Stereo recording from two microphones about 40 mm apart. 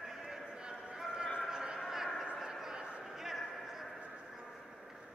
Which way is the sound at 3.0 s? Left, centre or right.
Centre.